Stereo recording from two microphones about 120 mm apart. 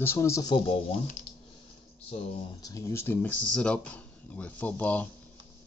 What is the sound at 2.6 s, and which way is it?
Speech, 25° left (ahead or behind).